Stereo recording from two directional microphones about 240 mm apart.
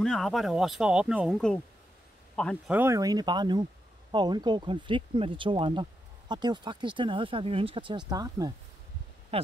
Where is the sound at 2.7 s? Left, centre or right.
Centre.